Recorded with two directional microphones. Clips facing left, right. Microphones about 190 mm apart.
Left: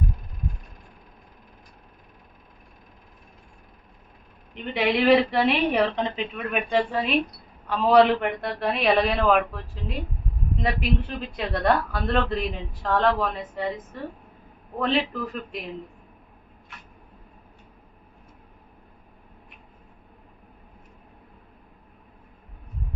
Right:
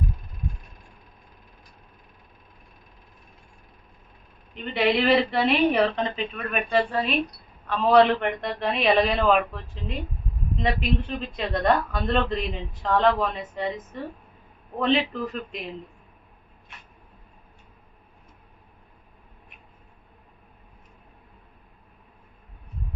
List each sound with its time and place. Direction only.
4.5 s a woman's voice: 15° left (ahead or behind)
14.8 s a man's voice: centre (ahead or behind)